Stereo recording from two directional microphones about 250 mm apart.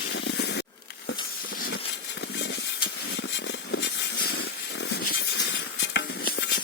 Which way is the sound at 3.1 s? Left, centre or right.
Left.